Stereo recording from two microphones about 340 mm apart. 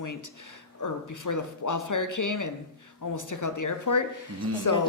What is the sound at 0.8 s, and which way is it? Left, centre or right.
Speech, left.